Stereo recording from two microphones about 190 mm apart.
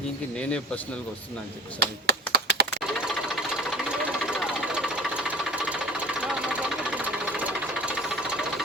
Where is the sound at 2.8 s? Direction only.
Centre (ahead or behind).